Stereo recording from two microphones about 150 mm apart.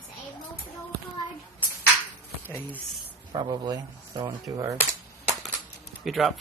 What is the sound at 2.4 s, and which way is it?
Speech, 15° left (ahead or behind).